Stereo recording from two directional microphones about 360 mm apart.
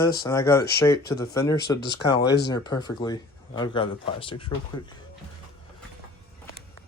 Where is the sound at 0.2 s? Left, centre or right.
Centre.